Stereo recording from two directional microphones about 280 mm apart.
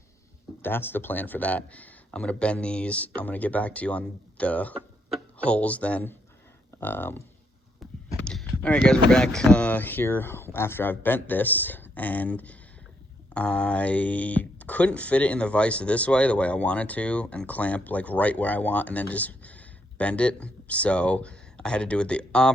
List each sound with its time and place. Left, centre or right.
0.6 s speech: centre
8.2 s speech: centre